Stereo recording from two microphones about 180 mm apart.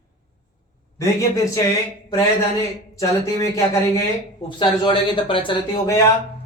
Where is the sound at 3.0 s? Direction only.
15° left (ahead or behind).